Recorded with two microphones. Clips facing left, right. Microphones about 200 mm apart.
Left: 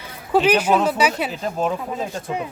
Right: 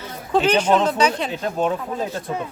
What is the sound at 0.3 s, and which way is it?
Speech, 10° left (ahead or behind).